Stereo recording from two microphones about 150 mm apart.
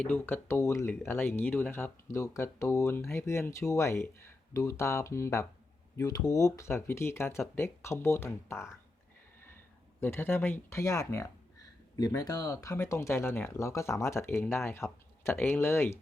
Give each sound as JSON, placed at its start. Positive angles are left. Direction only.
{"t": 0.0, "sound": "speech", "side_deg": 10}
{"t": 10.0, "sound": "speech", "side_deg": 15}